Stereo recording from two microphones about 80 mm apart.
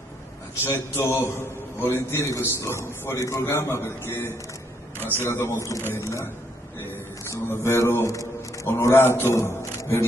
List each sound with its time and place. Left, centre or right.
0.7 s a man's voice: left